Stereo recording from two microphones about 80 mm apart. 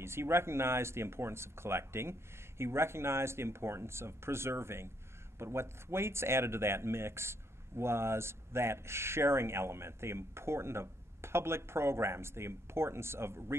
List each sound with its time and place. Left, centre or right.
0.0 s speech: right